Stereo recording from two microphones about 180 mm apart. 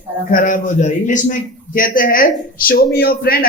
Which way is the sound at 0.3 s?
50° left (ahead or behind).